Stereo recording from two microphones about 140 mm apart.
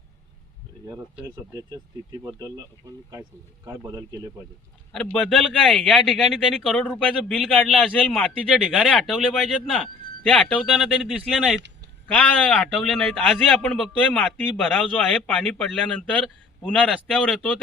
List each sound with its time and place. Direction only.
3.7 s a man's voice: 25° right (ahead or behind)
5.1 s a man's voice: 5° left (ahead or behind)
12.0 s a man's voice: 10° left (ahead or behind)